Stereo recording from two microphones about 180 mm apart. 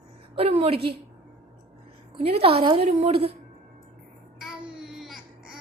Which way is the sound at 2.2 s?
30° right (ahead or behind).